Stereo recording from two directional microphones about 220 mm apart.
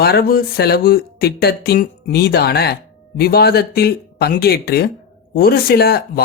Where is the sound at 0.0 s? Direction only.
45° left (ahead or behind).